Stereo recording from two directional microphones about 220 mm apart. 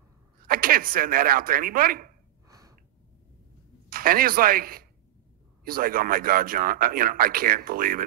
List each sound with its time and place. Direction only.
0.5 s speech: 40° right (ahead or behind)
2.4 s gasp: 15° right (ahead or behind)
3.9 s speech: 40° right (ahead or behind)